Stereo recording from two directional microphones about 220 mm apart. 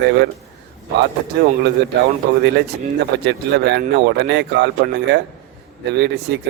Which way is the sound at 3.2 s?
50° right (ahead or behind).